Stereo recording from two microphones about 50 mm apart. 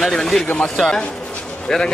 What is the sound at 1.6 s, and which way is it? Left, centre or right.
Speech, centre.